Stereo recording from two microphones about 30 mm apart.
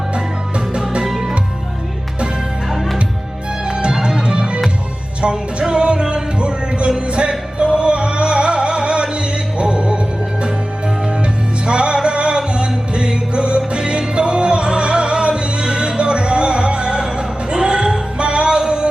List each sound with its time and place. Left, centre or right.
4.0 s music: right
11.6 s music: right